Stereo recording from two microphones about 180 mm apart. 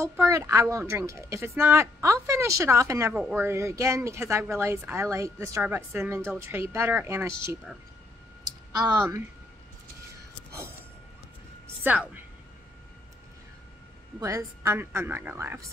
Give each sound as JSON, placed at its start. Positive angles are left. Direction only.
{"t": 0.0, "sound": "speech", "side_deg": -15}
{"t": 11.8, "sound": "speech", "side_deg": -10}
{"t": 14.2, "sound": "speech", "side_deg": -15}